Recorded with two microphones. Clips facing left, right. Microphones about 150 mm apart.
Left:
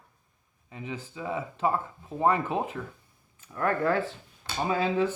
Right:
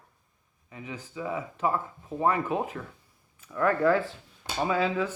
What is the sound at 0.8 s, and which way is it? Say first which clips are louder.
Speech: even; 30° left (ahead or behind).